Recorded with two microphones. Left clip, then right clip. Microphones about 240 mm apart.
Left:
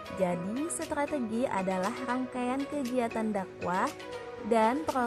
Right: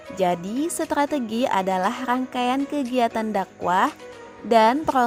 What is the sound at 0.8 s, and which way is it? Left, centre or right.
A woman's voice, right.